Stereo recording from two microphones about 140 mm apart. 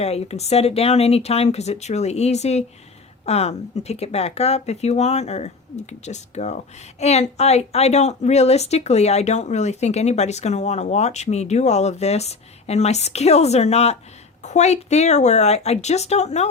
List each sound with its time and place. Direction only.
0.0 s a woman's voice: 50° left (ahead or behind)